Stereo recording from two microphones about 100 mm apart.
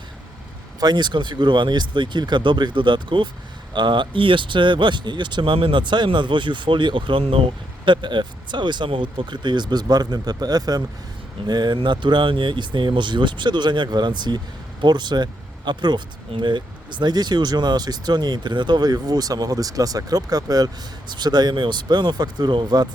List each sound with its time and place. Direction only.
0.8 s speech: 45° right (ahead or behind); by 7.4 s 70° right (ahead or behind)
7.9 s speech: 50° right (ahead or behind)